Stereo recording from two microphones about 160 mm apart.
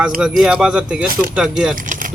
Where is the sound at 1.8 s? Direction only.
55° right (ahead or behind).